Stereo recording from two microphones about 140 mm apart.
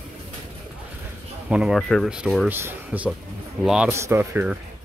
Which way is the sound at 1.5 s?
5° right (ahead or behind).